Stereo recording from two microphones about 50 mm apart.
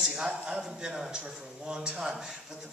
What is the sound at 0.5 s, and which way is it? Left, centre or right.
A man's voice, centre.